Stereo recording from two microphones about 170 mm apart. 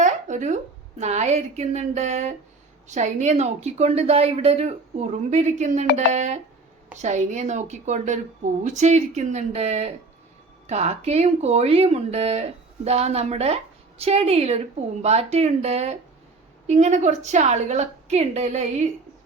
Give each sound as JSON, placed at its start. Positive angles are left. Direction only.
{"t": 0.0, "sound": "a woman's voice", "side_deg": -45}